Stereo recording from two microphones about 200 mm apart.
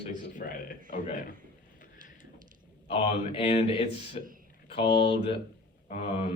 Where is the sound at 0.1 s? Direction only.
45° left (ahead or behind).